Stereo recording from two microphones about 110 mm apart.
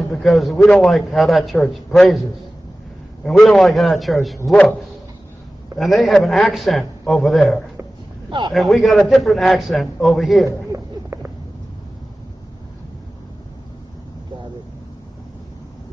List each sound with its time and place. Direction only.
0.1 s a man's voice: centre (ahead or behind)
3.3 s a man's voice: centre (ahead or behind)
5.8 s a man's voice: centre (ahead or behind)
8.3 s speech: 45° right (ahead or behind)
8.5 s a man's voice: centre (ahead or behind)
10.7 s a sound: 20° right (ahead or behind)